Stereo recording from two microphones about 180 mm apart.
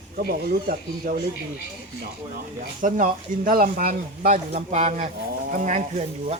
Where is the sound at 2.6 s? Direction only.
50° right (ahead or behind).